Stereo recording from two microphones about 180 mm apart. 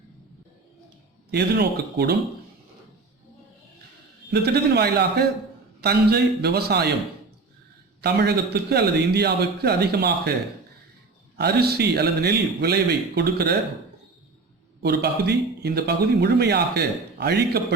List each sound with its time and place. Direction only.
1.3 s speech: 65° right (ahead or behind)
4.3 s speech: 65° right (ahead or behind)
8.0 s speech: 65° right (ahead or behind)
11.3 s speech: 60° right (ahead or behind)
14.8 s speech: 65° right (ahead or behind)